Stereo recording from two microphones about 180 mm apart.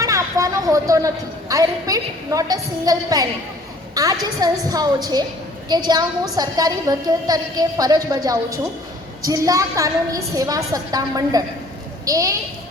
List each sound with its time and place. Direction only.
0.0 s a woman's voice: 15° right (ahead or behind)